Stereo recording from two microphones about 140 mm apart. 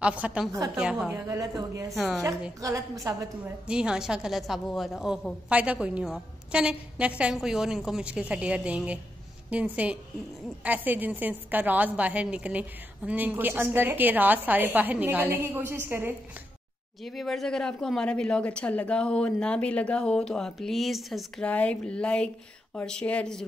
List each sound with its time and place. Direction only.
0.0 s a woman's voice: 10° right (ahead or behind)
1.1 s a woman's voice: 20° right (ahead or behind)
1.9 s speech: centre (ahead or behind)
2.6 s a woman's voice: 25° right (ahead or behind)
3.4 s a woman's voice: 5° right (ahead or behind)
17.0 s a woman's voice: centre (ahead or behind)